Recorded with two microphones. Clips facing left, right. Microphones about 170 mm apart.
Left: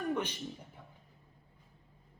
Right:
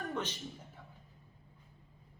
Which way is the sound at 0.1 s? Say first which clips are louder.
Left 5 dB; 15° left (ahead or behind).